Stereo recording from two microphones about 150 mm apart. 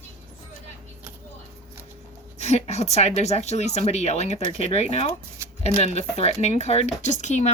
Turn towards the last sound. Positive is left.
turn(degrees=50)  # may be behind; listen again after turning